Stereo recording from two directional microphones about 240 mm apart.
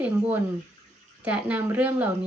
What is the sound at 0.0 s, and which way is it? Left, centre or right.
A woman's voice, centre.